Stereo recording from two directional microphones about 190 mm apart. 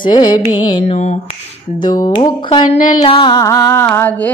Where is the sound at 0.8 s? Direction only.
35° left (ahead or behind).